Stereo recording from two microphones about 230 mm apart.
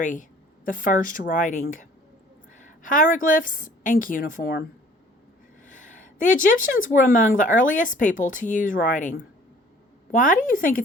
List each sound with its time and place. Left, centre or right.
0.0 s a woman's voice: left
5.6 s speech: left